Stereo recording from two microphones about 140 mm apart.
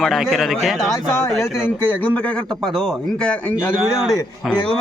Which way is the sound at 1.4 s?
10° left (ahead or behind).